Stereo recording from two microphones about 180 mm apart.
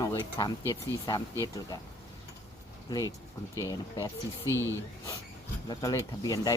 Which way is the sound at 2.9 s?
20° left (ahead or behind).